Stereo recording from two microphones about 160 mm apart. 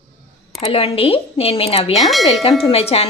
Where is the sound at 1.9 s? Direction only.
Centre (ahead or behind).